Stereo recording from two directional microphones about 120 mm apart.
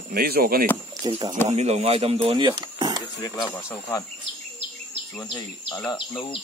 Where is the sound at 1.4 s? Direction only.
65° right (ahead or behind); by 3.0 s 35° right (ahead or behind).